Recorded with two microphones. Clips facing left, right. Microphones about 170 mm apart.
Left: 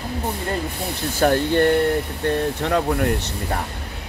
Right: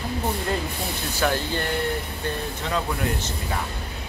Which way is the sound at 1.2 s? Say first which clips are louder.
Left 8 dB; 55° left (ahead or behind).